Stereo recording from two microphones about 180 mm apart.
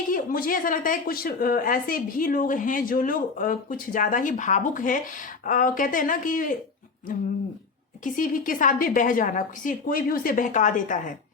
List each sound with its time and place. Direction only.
0.1 s a woman's voice: 50° left (ahead or behind)
8.0 s a woman's voice: 50° left (ahead or behind)